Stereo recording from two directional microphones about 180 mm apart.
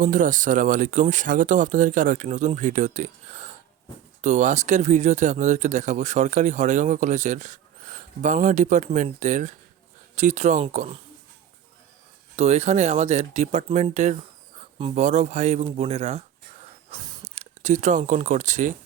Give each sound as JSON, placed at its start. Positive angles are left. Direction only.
{"t": 0.0, "sound": "speech", "side_deg": -45}
{"t": 12.4, "sound": "speech", "side_deg": -35}
{"t": 17.3, "sound": "speech", "side_deg": -40}